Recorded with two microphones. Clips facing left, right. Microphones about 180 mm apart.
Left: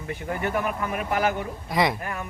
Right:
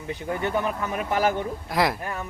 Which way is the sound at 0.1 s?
20° right (ahead or behind).